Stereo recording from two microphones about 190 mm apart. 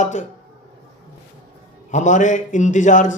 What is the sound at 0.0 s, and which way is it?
Speech, 40° left (ahead or behind).